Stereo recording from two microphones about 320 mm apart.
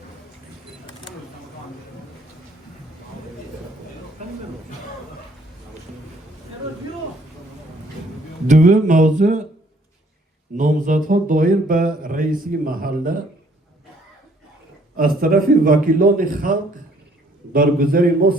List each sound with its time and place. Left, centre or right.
8.4 s speech: right
10.6 s speech: right
14.9 s speech: right